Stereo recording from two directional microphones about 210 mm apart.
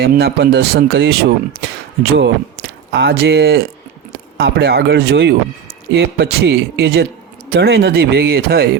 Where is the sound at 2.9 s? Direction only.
55° right (ahead or behind).